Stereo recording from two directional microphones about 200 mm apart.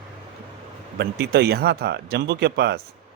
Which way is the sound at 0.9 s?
55° right (ahead or behind).